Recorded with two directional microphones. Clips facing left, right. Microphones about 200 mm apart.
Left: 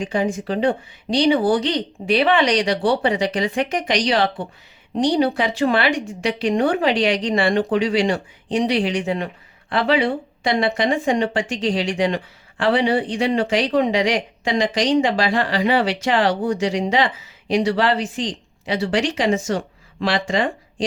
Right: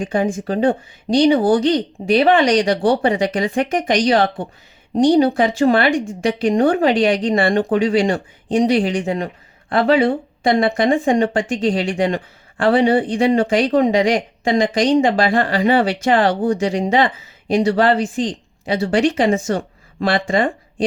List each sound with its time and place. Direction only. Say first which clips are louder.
0.0 s a woman's voice: right 2 dB; 50° right (ahead or behind)